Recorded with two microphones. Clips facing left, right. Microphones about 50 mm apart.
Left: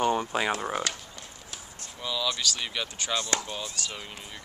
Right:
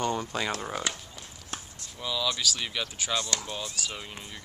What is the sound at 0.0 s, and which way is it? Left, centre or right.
Speech, centre.